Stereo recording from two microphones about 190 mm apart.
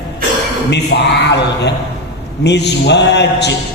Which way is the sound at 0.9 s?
65° left (ahead or behind).